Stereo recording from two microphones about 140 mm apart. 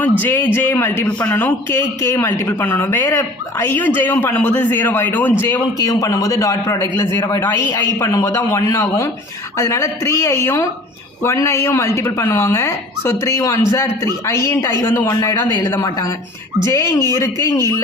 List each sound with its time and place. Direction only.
0.2 s a man's voice: 15° left (ahead or behind)